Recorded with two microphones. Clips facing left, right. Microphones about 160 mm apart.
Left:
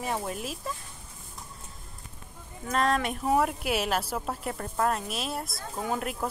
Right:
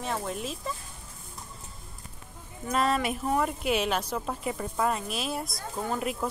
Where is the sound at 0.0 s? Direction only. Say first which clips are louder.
Even; 5° left (ahead or behind).